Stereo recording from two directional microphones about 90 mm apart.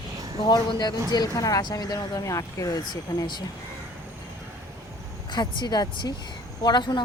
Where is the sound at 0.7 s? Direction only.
50° left (ahead or behind).